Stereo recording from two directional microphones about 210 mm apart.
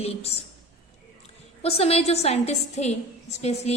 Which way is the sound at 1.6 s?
30° left (ahead or behind).